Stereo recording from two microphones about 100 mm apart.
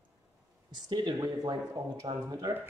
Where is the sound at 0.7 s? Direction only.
45° right (ahead or behind).